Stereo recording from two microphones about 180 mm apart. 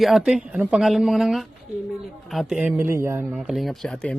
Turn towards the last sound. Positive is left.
turn(degrees=5)  # may be behind; listen again after turning